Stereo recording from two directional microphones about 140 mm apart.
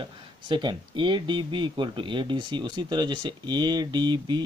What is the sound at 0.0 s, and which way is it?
Speech, 35° right (ahead or behind).